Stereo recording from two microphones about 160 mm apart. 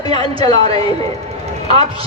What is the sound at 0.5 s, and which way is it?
Speech, 40° right (ahead or behind).